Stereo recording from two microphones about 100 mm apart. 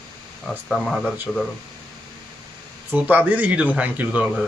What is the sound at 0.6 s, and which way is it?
Speech, centre (ahead or behind).